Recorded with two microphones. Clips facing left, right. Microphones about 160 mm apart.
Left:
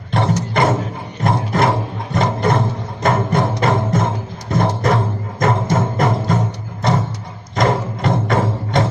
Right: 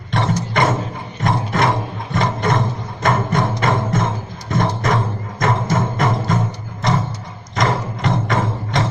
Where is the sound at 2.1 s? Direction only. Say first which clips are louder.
Left 2 dB; 35° left (ahead or behind).